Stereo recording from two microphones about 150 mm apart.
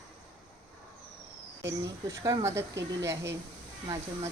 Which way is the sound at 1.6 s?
20° right (ahead or behind).